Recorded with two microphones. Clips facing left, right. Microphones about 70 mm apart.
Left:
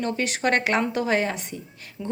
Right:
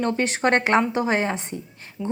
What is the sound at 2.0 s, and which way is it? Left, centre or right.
Speech, centre.